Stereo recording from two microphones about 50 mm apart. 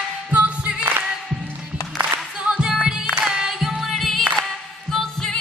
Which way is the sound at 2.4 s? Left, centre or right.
Right.